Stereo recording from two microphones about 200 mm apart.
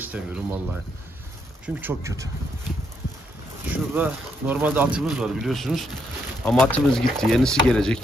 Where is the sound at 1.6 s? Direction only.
10° right (ahead or behind).